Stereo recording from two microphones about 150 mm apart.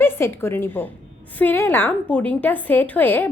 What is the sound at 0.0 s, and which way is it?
A woman's voice, 15° left (ahead or behind).